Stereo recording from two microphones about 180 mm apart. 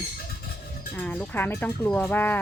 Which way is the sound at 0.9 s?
10° left (ahead or behind).